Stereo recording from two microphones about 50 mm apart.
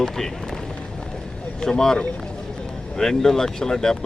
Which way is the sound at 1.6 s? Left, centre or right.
Centre.